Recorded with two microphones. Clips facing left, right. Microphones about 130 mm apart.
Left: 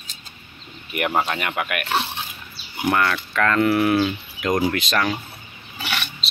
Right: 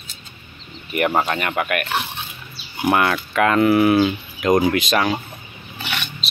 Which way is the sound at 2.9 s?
15° right (ahead or behind).